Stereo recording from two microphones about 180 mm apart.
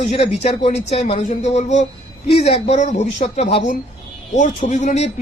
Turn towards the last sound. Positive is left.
turn(degrees=40)  # may be behind; listen again after turning